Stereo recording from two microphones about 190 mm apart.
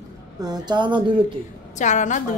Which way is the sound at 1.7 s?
40° left (ahead or behind).